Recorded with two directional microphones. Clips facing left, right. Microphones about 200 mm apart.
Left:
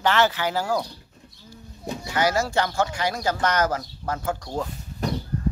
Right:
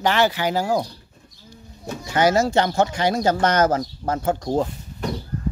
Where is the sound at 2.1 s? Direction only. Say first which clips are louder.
Right 5 dB; 25° right (ahead or behind).